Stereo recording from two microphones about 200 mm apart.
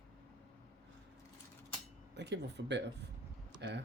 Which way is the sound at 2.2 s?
60° right (ahead or behind).